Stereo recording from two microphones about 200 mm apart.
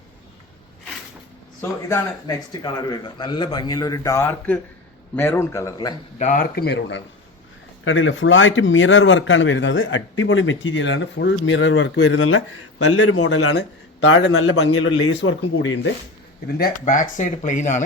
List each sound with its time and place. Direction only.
1.9 s a man's voice: 15° left (ahead or behind)
6.1 s speech: 40° left (ahead or behind); by 7.0 s 60° left (ahead or behind)
7.9 s speech: 80° left
16.5 s speech: 50° left (ahead or behind)